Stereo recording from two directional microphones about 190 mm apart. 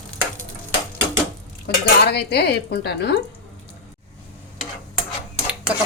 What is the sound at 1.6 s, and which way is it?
Dishes, 60° left (ahead or behind).